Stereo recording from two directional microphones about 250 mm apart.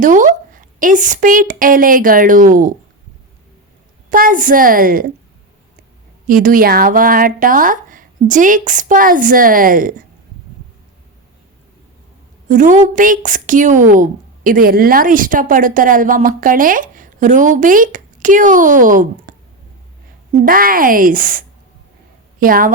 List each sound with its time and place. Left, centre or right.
0.0 s a woman's voice: right
4.1 s a woman's voice: right
6.2 s a woman's voice: right
12.5 s a woman's voice: right
20.4 s a woman's voice: right